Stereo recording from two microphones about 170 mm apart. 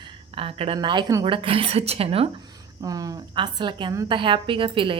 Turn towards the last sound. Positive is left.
turn(degrees=-30)  # may be behind; listen again after turning